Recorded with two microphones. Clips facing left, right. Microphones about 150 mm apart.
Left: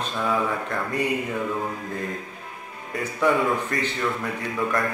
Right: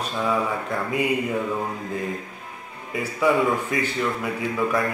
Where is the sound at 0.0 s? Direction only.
5° right (ahead or behind).